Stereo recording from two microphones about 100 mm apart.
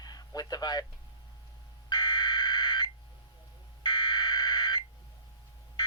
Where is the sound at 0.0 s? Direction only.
40° left (ahead or behind).